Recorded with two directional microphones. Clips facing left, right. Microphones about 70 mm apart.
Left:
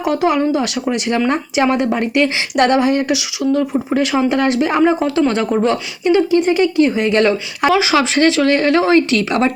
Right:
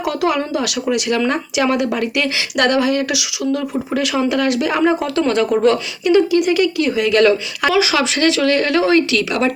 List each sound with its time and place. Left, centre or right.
0.0 s speech: left
3.4 s speech: centre
3.9 s speech: left